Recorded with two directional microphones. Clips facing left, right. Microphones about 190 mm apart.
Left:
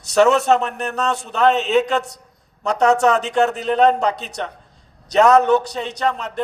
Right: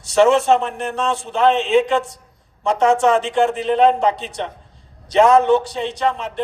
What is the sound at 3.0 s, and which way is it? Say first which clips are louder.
A man's voice: right 1 dB; 40° left (ahead or behind).